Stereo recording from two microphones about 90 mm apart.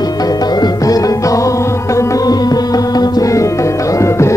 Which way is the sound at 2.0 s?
45° left (ahead or behind).